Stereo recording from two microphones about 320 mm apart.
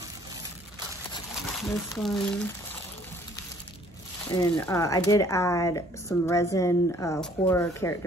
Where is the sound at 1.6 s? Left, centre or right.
Centre.